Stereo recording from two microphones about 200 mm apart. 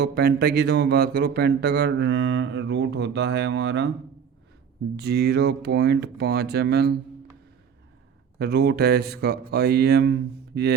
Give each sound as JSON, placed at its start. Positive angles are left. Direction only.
{"t": 0.0, "sound": "speech", "side_deg": -50}
{"t": 4.9, "sound": "speech", "side_deg": -55}
{"t": 8.4, "sound": "speech", "side_deg": -55}